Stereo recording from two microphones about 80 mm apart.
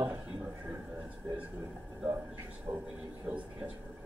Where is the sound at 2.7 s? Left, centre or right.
Right.